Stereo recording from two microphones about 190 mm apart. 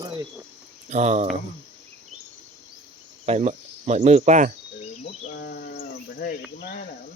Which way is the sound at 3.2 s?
35° right (ahead or behind).